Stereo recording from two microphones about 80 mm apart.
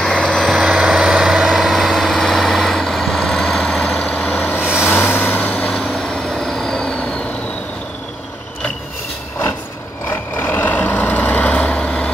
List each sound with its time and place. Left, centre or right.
0.0 s vehicle: centre
0.5 s vehicle: centre
4.8 s vehicle: left
5.7 s vehicle: centre
10.0 s vehicle: left